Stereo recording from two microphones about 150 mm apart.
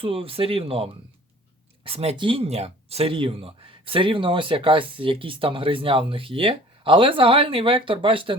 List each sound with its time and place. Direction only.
0.0 s speech: 40° right (ahead or behind)